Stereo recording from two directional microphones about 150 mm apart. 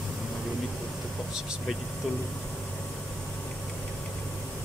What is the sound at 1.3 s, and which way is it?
Speech, 5° right (ahead or behind).